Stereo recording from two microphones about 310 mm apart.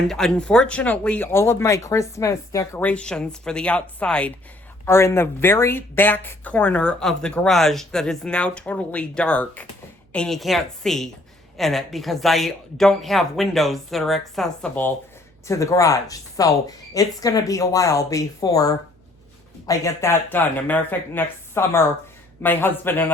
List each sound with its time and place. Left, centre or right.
0.1 s speech: centre